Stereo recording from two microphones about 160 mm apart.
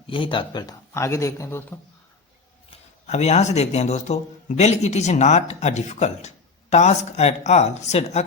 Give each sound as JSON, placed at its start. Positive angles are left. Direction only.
{"t": 0.1, "sound": "speech", "side_deg": 30}
{"t": 2.6, "sound": "speech", "side_deg": 45}